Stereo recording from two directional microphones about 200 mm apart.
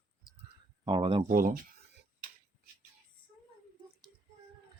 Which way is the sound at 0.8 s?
25° right (ahead or behind).